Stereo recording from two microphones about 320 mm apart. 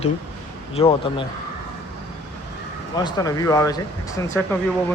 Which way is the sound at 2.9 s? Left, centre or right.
Centre.